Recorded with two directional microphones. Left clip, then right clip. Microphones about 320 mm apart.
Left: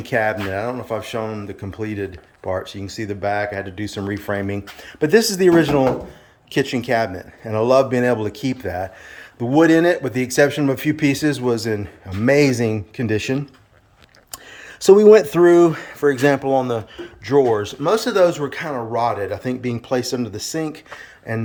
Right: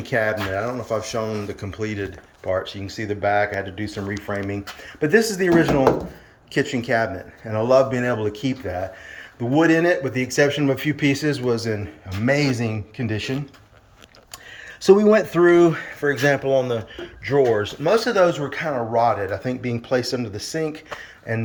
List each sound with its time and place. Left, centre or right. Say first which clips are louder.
0.1 s speech: left 2 dB; centre
10.2 s speech: left 3 dB; left
10.7 s speech: left 2 dB; centre
14.8 s speech: left 5 dB; left